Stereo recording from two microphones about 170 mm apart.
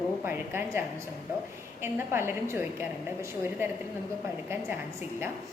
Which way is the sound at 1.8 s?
15° right (ahead or behind).